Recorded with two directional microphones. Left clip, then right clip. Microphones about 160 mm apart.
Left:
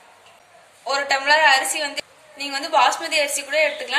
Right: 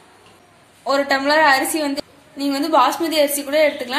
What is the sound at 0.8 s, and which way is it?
A woman's voice, 20° right (ahead or behind).